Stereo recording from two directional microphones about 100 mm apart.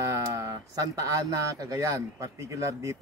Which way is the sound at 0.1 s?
30° right (ahead or behind).